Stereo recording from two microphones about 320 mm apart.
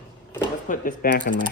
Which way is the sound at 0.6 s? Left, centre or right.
Left.